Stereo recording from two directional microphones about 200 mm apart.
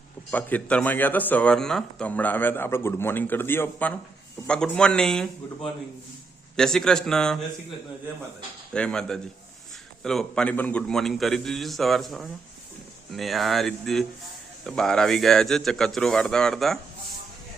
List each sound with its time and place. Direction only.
0.3 s a man's voice: 10° left (ahead or behind)
8.7 s a man's voice: 5° left (ahead or behind)